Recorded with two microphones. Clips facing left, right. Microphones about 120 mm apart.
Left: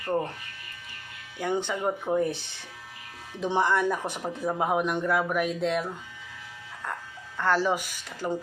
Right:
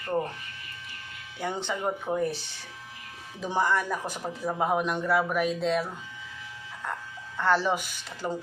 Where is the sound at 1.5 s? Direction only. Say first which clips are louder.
Left 3 dB; 15° left (ahead or behind).